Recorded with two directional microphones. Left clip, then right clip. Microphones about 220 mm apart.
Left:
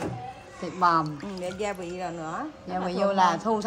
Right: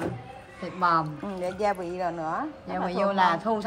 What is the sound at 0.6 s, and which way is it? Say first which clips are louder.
Speech: left 1 dB; 10° left (ahead or behind).